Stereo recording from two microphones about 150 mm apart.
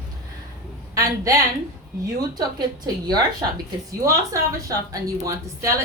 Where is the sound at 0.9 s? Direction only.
20° right (ahead or behind).